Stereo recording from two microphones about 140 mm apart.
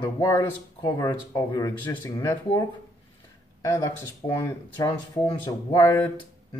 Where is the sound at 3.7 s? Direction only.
25° left (ahead or behind).